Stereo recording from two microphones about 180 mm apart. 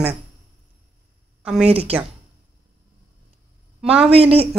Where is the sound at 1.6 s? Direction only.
35° right (ahead or behind).